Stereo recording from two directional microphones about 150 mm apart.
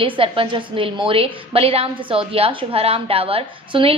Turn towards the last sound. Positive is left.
turn(degrees=-40)  # may be behind; listen again after turning